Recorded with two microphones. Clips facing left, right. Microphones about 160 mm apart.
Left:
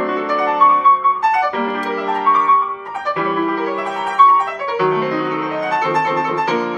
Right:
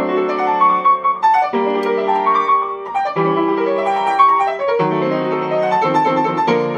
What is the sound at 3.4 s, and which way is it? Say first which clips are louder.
Music: right 5 dB; 30° right (ahead or behind).